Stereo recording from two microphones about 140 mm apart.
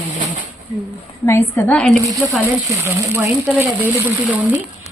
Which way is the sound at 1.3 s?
10° left (ahead or behind).